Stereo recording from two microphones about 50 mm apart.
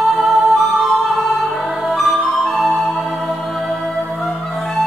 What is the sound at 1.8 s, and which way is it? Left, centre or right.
Music, centre.